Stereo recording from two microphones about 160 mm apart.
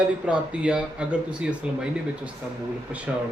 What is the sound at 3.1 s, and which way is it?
Speech, 5° right (ahead or behind).